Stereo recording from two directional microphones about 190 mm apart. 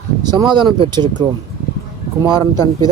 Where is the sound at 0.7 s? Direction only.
20° right (ahead or behind).